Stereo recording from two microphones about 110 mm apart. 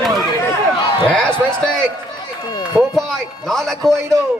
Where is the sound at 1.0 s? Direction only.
10° left (ahead or behind).